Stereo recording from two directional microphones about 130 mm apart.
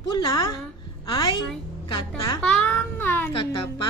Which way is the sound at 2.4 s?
10° left (ahead or behind).